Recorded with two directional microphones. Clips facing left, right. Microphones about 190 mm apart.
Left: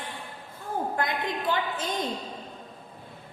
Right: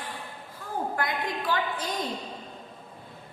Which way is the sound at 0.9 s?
25° left (ahead or behind).